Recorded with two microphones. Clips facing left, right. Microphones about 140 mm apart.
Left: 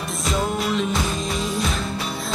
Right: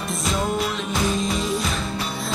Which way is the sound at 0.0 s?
Centre (ahead or behind).